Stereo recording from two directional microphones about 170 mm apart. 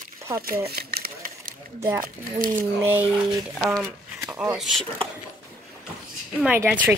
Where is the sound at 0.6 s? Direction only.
65° right (ahead or behind).